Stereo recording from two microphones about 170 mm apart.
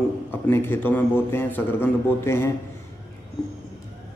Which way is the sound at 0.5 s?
10° left (ahead or behind).